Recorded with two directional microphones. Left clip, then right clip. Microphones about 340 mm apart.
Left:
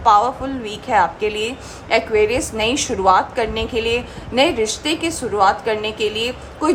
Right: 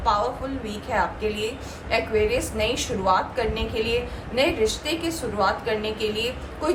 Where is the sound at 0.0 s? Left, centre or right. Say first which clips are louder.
Left 9 dB; centre.